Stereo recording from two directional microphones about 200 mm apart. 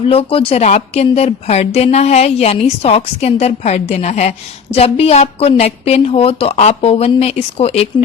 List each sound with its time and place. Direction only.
0.0 s a woman's voice: 30° left (ahead or behind)